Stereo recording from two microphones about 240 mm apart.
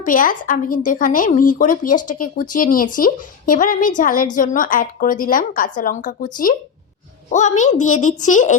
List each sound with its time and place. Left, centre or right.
0.0 s a woman's voice: left